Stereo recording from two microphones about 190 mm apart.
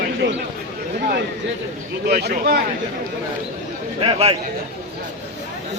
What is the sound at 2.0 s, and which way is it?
Speech, 50° right (ahead or behind).